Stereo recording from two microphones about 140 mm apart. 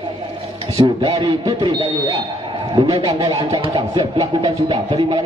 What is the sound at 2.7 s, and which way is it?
A man's voice, 35° right (ahead or behind).